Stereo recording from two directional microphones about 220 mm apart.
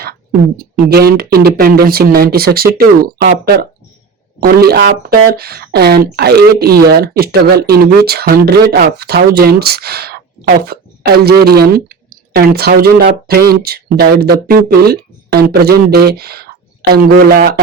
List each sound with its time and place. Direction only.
0.6 s speech: 45° right (ahead or behind)